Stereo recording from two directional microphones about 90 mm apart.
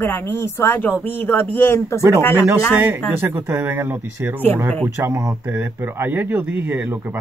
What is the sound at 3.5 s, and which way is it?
Speech, 25° right (ahead or behind).